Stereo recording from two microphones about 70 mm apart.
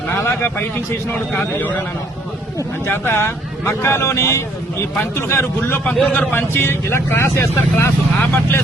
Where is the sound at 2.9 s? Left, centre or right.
Left.